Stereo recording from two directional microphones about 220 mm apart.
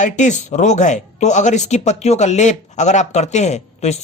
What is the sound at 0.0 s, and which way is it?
Speech, 35° left (ahead or behind).